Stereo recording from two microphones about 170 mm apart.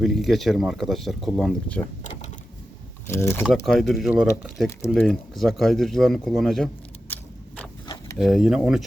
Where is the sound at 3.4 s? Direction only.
5° left (ahead or behind).